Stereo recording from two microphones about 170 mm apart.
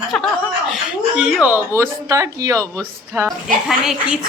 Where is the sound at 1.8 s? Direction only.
15° right (ahead or behind).